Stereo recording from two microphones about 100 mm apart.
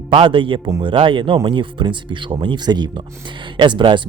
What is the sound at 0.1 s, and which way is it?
Speech, 60° right (ahead or behind).